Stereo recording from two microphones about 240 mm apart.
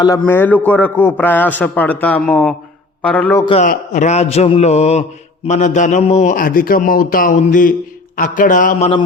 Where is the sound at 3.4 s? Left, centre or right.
Left.